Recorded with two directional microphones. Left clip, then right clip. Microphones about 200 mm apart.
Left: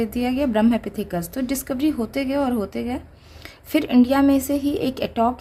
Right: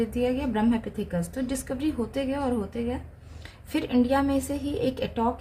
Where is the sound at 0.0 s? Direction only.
50° left (ahead or behind).